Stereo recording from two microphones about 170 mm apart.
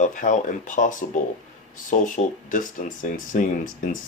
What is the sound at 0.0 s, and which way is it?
Speech, 50° left (ahead or behind).